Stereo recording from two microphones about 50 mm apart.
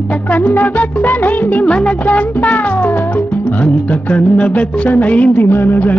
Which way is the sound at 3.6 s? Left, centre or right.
Left.